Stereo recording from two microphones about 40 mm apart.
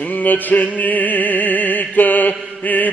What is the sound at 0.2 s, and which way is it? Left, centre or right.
Music, left.